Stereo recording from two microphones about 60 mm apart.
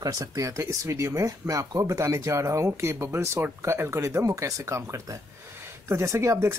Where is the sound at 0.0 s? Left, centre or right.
Right.